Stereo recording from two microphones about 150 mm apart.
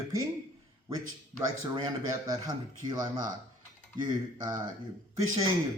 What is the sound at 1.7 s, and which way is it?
Speech, 30° right (ahead or behind).